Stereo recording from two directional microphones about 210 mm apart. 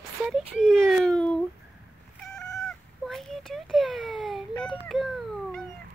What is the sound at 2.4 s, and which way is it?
Cat, centre (ahead or behind).